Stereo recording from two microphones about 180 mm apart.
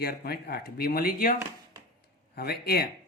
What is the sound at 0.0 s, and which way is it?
Speech, 60° left (ahead or behind).